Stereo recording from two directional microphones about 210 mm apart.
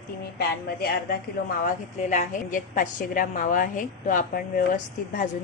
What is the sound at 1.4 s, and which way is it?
A woman's voice, 35° left (ahead or behind).